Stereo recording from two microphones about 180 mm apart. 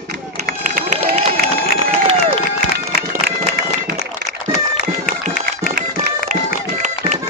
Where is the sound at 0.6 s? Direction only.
45° right (ahead or behind).